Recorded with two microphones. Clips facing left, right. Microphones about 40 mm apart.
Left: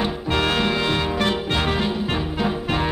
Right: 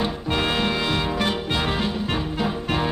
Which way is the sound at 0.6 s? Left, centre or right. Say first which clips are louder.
Left 2 dB; centre.